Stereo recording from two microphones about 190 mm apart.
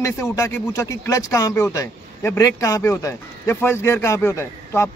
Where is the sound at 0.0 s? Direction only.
15° left (ahead or behind).